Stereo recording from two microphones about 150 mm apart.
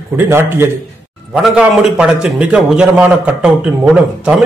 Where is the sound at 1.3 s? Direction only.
5° right (ahead or behind).